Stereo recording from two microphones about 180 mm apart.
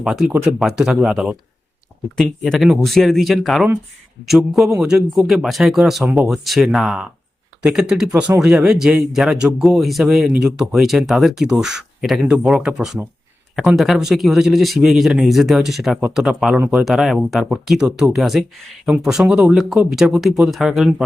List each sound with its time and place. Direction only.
0.0 s speech: 5° right (ahead or behind)